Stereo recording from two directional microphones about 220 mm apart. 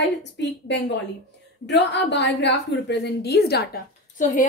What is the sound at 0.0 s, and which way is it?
Speech, 50° left (ahead or behind).